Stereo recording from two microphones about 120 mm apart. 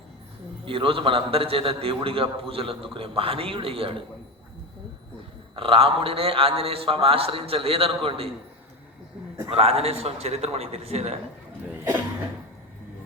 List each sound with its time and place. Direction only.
0.6 s a man's voice: 50° right (ahead or behind)
5.5 s a man's voice: 50° right (ahead or behind)
9.5 s a man's voice: 55° right (ahead or behind)